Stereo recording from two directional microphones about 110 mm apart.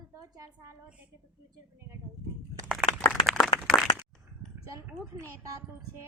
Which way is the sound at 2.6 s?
Centre (ahead or behind).